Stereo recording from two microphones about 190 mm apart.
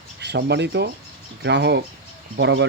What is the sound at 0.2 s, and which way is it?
Speech, 60° right (ahead or behind).